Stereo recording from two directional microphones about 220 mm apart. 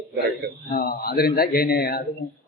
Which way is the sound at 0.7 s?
40° left (ahead or behind).